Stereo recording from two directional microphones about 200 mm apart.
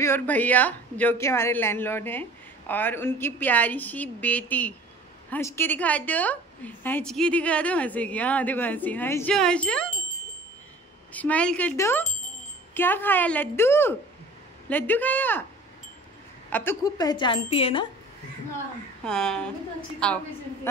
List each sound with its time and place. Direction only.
0.0 s a woman's voice: 10° left (ahead or behind)
11.1 s a woman's voice: 5° left (ahead or behind)
16.4 s a woman's voice: 10° left (ahead or behind); by 17.8 s 30° left (ahead or behind)
19.0 s a woman's voice: 5° left (ahead or behind)